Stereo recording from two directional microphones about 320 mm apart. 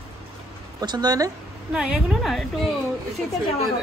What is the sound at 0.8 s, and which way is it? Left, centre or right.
A woman's voice, centre.